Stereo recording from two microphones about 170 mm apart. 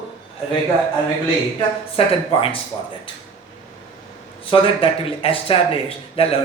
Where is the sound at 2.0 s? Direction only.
35° left (ahead or behind).